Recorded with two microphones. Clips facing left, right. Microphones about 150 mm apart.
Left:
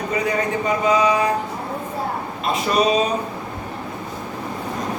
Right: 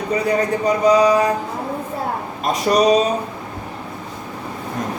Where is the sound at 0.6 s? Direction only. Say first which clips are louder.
Right 4 dB; 40° right (ahead or behind).